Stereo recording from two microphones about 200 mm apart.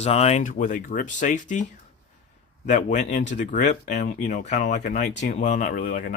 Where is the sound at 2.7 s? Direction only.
35° left (ahead or behind).